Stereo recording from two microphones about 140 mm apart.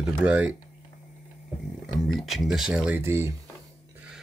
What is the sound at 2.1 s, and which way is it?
Speech, centre (ahead or behind).